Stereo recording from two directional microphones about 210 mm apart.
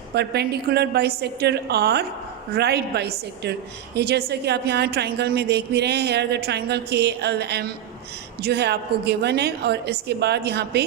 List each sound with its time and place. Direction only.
0.1 s a woman's voice: 50° right (ahead or behind)